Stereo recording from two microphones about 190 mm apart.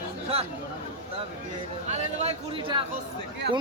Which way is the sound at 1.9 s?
35° right (ahead or behind).